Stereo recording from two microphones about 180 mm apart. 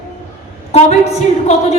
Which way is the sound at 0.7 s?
35° left (ahead or behind).